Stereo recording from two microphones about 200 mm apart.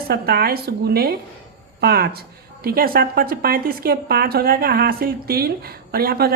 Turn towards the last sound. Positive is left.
turn(degrees=-50)  # may be behind; listen again after turning